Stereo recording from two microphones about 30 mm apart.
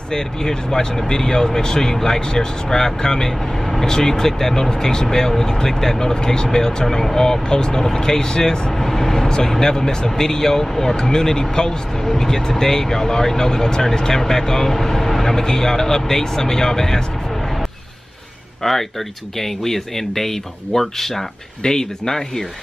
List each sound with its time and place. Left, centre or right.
0.1 s speech: left
6.1 s speech: left
7.4 s speech: left
8.7 s speech: centre
12.0 s speech: centre
18.6 s speech: centre
21.6 s speech: centre